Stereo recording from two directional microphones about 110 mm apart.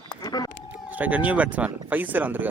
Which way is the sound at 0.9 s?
15° right (ahead or behind).